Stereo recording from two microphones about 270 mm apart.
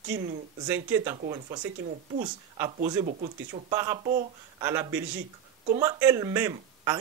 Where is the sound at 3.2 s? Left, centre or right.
Centre.